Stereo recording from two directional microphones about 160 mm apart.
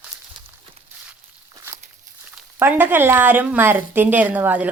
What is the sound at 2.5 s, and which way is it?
Speech, 15° right (ahead or behind).